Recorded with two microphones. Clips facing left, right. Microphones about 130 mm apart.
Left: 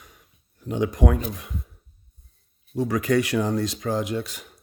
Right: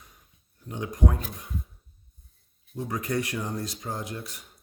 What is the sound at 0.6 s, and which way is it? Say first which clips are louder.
Speech: left 6 dB; 90° left.